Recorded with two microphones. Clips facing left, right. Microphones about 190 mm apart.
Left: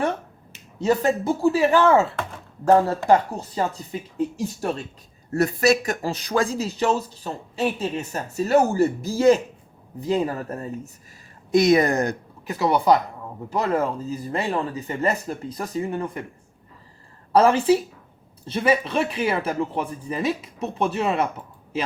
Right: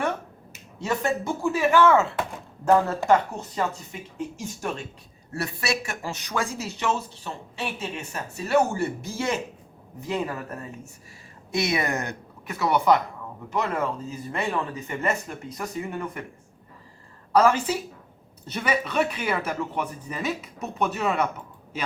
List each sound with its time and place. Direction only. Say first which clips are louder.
0.8 s speech: left 6 dB; 35° left (ahead or behind)
17.3 s speech: left 4 dB; 30° left (ahead or behind)